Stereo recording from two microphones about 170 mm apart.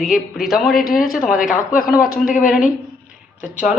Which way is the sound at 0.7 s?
60° left (ahead or behind).